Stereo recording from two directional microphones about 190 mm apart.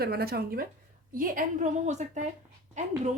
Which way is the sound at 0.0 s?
55° right (ahead or behind).